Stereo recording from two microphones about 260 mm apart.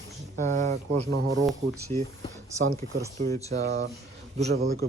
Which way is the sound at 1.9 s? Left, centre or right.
Right.